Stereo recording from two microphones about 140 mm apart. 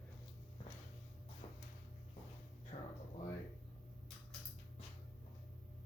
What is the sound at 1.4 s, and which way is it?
Music, 45° left (ahead or behind).